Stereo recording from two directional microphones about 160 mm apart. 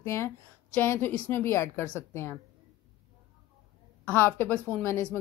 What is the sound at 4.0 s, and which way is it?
Speech, 15° left (ahead or behind).